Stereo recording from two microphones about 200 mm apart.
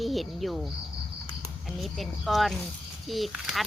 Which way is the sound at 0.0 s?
Centre (ahead or behind).